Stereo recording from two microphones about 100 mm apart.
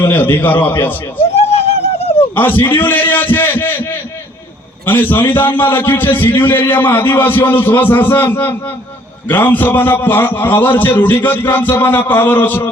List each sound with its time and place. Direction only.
0.0 s a man's voice: 20° left (ahead or behind)
1.3 s a sound: 90° left
2.3 s a man's voice: 20° left (ahead or behind)
4.9 s a man's voice: 20° left (ahead or behind)